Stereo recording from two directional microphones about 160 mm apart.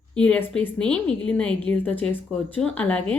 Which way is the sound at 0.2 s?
5° left (ahead or behind).